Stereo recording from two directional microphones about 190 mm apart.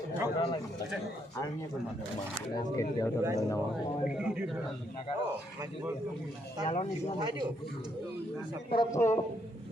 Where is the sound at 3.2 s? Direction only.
15° right (ahead or behind).